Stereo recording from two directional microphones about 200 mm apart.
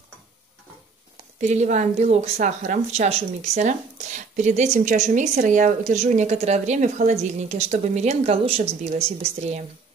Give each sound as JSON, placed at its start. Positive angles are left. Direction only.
{"t": 1.1, "sound": "a woman's voice", "side_deg": -35}